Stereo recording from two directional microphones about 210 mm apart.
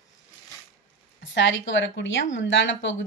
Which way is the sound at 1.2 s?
65° left (ahead or behind).